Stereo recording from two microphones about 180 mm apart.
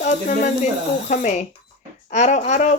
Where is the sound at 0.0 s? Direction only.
40° left (ahead or behind).